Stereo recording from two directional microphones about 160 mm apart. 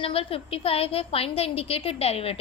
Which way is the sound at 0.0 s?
35° left (ahead or behind).